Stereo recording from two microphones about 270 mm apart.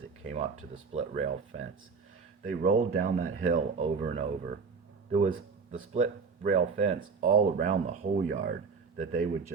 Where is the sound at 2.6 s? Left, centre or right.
Right.